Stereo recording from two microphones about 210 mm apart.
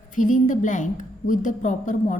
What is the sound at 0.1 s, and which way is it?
A woman's voice, 40° left (ahead or behind).